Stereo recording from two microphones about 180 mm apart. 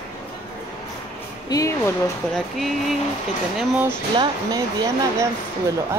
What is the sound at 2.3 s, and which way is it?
Speech, centre (ahead or behind).